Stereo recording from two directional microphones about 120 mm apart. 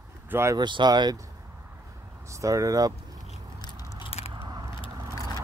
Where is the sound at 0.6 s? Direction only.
40° right (ahead or behind).